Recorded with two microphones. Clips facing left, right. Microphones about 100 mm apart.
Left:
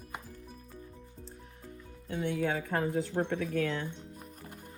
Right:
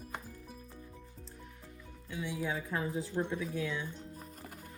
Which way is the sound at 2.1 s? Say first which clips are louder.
Left 5 dB; 60° left (ahead or behind).